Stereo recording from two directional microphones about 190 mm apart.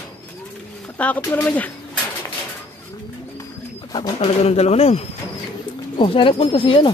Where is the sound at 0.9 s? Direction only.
10° left (ahead or behind).